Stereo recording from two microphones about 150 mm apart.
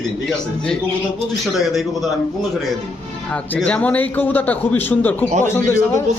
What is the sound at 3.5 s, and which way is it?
A man's voice, 5° left (ahead or behind).